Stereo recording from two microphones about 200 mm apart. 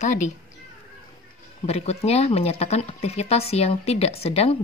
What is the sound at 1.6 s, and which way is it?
Speech, 30° left (ahead or behind).